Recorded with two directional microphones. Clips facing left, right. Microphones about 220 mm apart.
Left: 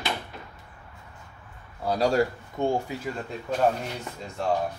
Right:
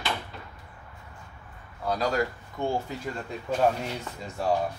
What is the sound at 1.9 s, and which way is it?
Speech, 30° left (ahead or behind).